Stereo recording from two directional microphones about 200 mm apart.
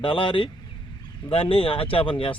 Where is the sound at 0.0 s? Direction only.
25° left (ahead or behind).